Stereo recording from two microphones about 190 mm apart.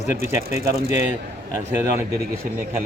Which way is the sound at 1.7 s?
15° right (ahead or behind).